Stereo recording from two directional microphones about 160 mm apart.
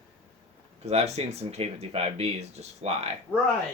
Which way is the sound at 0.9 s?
40° right (ahead or behind).